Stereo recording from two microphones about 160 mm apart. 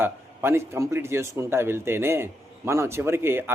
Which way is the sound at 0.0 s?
15° right (ahead or behind).